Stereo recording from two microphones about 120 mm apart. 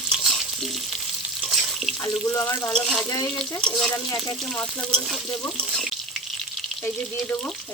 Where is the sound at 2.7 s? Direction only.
5° left (ahead or behind).